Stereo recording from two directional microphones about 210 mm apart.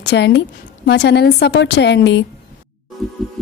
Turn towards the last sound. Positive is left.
turn(degrees=0)  # may be behind; listen again after turning